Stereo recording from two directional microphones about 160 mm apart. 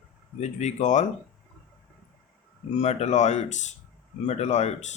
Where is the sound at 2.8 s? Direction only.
45° left (ahead or behind).